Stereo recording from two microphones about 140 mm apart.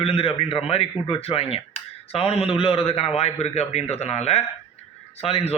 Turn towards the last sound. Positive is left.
turn(degrees=45)  # may be behind; listen again after turning